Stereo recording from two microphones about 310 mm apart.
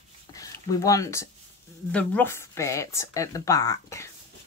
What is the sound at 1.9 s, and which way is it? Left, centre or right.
Speech, centre.